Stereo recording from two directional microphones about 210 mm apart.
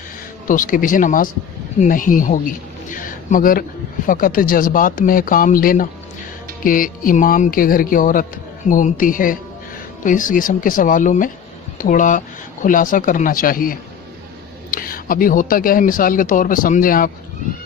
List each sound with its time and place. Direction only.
0.4 s a man's voice: 40° left (ahead or behind)